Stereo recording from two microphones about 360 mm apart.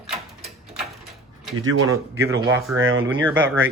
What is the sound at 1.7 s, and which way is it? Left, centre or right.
Speech, right.